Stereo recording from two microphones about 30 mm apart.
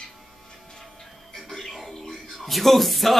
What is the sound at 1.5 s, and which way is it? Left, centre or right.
Music, centre.